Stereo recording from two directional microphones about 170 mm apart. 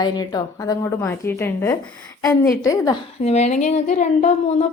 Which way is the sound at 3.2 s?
40° left (ahead or behind).